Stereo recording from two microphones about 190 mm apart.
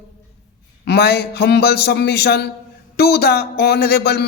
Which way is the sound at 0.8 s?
55° left (ahead or behind).